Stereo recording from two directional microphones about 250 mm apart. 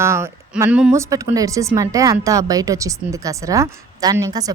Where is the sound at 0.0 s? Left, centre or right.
Centre.